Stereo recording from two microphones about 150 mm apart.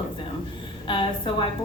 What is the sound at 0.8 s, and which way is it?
Speech, 35° left (ahead or behind).